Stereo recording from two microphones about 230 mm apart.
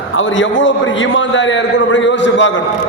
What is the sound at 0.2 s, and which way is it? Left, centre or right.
A man's voice, left.